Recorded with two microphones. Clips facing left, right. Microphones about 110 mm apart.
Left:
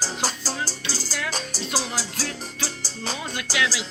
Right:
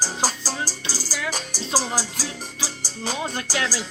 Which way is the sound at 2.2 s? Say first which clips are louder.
Left 1 dB; 10° right (ahead or behind).